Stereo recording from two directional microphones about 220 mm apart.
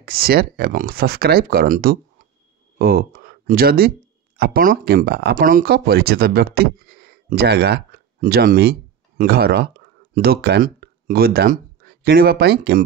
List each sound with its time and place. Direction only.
0.0 s speech: 45° right (ahead or behind)